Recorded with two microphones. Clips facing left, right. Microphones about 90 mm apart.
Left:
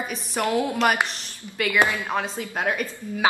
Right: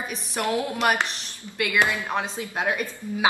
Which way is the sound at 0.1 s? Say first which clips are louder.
Left 2 dB; centre (ahead or behind).